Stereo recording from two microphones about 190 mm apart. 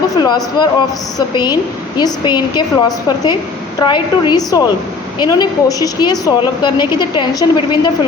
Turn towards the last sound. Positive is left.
turn(degrees=25)  # may be behind; listen again after turning